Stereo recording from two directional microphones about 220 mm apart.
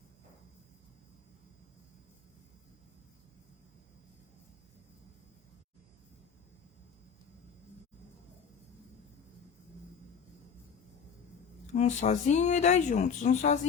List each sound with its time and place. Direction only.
11.6 s speech: 35° left (ahead or behind)